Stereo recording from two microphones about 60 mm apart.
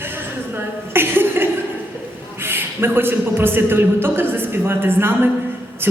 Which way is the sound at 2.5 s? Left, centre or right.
Right.